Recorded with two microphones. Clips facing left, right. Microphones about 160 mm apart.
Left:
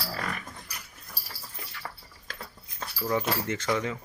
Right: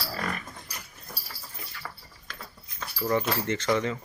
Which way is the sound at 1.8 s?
25° left (ahead or behind).